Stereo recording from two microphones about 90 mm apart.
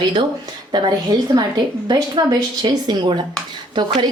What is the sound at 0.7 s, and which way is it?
A woman's voice, 45° right (ahead or behind).